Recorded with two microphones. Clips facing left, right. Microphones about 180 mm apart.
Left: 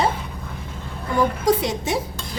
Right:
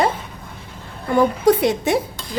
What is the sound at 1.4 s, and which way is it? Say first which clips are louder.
Speech: right 5 dB; 60° right (ahead or behind).